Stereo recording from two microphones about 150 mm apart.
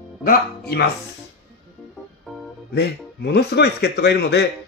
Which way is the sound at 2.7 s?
90° left.